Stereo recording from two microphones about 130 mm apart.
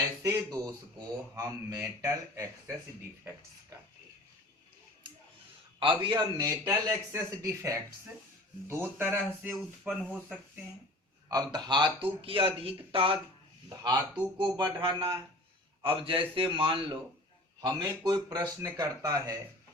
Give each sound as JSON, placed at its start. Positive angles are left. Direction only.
{"t": 0.2, "sound": "a man's voice", "side_deg": -30}
{"t": 5.8, "sound": "a man's voice", "side_deg": -40}
{"t": 11.3, "sound": "speech", "side_deg": -30}
{"t": 13.8, "sound": "speech", "side_deg": -30}
{"t": 17.8, "sound": "a man's voice", "side_deg": -30}